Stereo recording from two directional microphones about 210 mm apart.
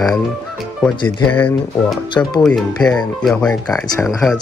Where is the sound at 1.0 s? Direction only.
5° left (ahead or behind).